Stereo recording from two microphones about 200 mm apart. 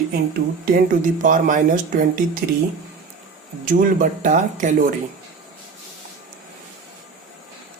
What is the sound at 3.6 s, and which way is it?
Speech, 40° right (ahead or behind).